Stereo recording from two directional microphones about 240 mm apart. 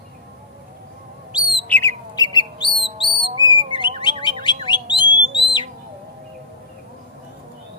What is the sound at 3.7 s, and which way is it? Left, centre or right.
Bird, centre.